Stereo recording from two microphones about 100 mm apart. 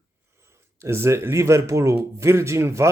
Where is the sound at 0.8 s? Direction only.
25° right (ahead or behind).